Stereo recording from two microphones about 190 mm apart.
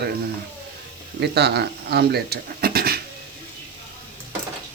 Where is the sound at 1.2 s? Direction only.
60° right (ahead or behind).